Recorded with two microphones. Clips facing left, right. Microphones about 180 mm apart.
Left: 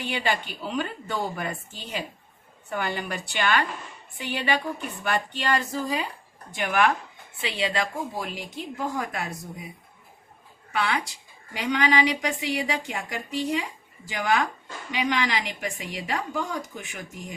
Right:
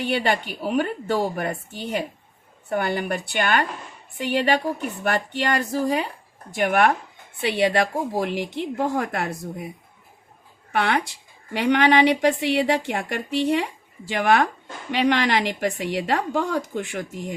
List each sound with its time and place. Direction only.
0.0 s a woman's voice: 55° right (ahead or behind)
10.7 s speech: 60° right (ahead or behind)